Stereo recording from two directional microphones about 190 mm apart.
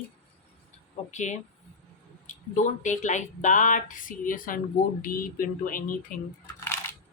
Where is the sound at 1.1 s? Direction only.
40° left (ahead or behind).